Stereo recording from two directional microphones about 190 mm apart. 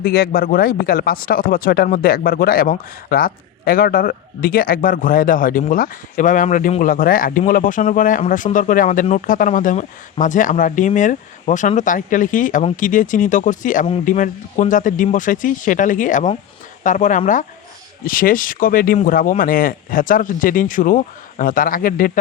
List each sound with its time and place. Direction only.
0.0 s speech: 50° left (ahead or behind)